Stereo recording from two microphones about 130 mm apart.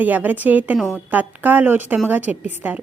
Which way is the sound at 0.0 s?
15° right (ahead or behind).